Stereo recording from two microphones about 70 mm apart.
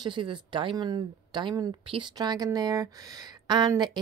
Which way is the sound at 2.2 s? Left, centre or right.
Right.